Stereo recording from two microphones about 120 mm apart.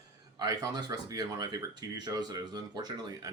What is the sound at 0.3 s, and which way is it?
Speech, 35° right (ahead or behind).